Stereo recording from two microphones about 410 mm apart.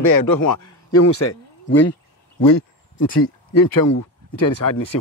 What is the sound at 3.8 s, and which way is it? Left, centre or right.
Speech, left.